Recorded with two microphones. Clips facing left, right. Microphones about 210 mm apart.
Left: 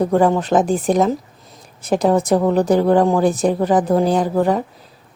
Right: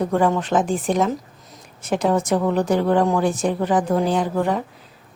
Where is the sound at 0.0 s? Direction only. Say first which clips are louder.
Left 4 dB; 35° left (ahead or behind).